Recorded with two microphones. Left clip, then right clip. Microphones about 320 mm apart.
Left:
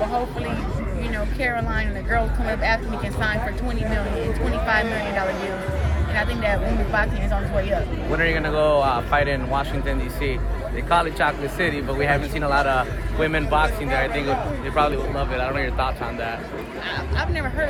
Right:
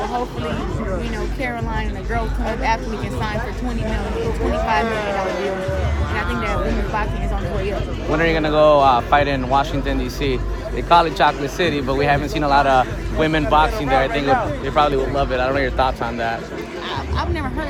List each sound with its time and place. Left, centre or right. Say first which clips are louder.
6.1 s speech: even; centre
8.1 s speech: right 4 dB; right
10.8 s speech: right 6 dB; right